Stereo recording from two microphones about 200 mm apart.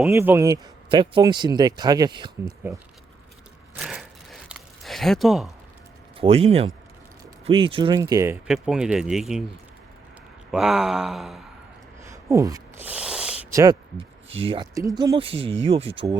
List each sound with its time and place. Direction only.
0.1 s speech: 10° right (ahead or behind)
3.8 s a sound: centre (ahead or behind)
6.1 s speech: 30° right (ahead or behind)
8.4 s speech: 5° right (ahead or behind)
10.5 s speech: 5° right (ahead or behind)
12.1 s a sound: 15° right (ahead or behind)
13.5 s speech: 15° right (ahead or behind)
14.3 s speech: 30° right (ahead or behind)